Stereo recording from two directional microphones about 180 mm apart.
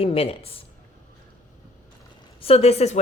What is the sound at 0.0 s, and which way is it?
Speech, 35° left (ahead or behind).